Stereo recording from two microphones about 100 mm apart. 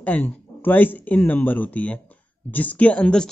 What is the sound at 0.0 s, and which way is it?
Speech, 15° left (ahead or behind).